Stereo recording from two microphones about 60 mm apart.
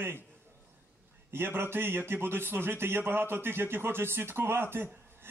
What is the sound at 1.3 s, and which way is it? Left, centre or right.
A man's voice, right.